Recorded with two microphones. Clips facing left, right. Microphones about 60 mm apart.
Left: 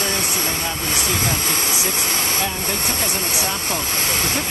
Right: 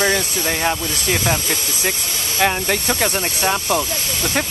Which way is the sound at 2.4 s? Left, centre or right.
Right.